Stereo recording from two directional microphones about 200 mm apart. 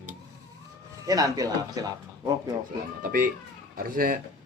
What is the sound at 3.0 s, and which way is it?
Speech, 45° right (ahead or behind).